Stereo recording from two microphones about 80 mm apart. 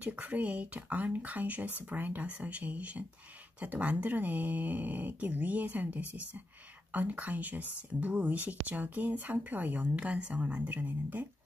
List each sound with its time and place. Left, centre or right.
0.0 s speech: centre